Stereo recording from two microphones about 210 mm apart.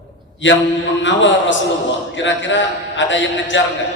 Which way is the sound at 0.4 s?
60° left (ahead or behind).